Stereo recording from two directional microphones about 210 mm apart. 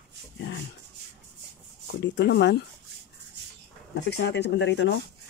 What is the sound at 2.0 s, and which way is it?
Speech, 55° left (ahead or behind).